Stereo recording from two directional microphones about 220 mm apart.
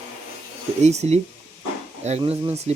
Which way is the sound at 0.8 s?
30° right (ahead or behind).